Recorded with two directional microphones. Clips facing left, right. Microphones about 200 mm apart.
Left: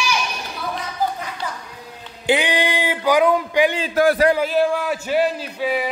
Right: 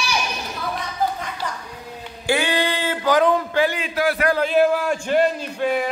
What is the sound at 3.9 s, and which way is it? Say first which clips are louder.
Speech: left 5 dB; 45° left (ahead or behind).